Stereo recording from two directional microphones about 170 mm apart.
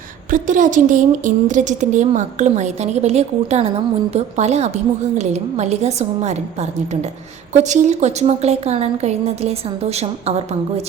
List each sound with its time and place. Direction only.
0.3 s a woman's voice: 50° right (ahead or behind)